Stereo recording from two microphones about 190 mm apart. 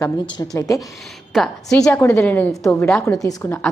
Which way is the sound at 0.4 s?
15° left (ahead or behind).